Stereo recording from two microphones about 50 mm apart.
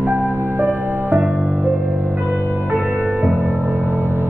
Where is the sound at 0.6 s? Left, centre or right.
Right.